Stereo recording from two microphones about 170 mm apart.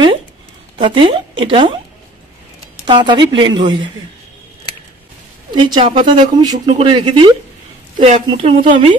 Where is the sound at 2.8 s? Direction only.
25° right (ahead or behind).